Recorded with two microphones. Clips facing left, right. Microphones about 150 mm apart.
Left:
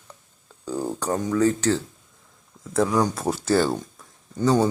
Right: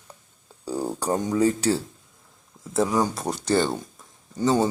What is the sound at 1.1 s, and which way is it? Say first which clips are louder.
Speech: right 1 dB; 20° right (ahead or behind).